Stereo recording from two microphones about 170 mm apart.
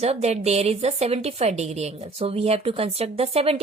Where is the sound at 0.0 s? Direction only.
40° right (ahead or behind).